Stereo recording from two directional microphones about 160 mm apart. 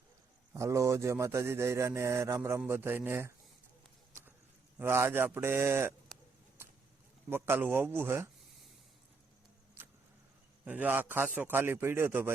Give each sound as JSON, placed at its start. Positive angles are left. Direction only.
{"t": 0.5, "sound": "speech", "side_deg": -20}
{"t": 4.8, "sound": "speech", "side_deg": -15}
{"t": 7.3, "sound": "speech", "side_deg": -15}
{"t": 10.7, "sound": "speech", "side_deg": -10}